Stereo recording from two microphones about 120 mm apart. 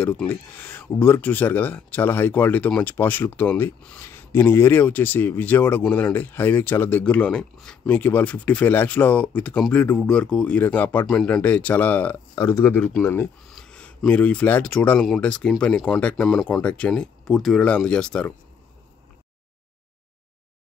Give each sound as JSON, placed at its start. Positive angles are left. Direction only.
{"t": 0.0, "sound": "speech", "side_deg": 15}
{"t": 13.5, "sound": "speech", "side_deg": 5}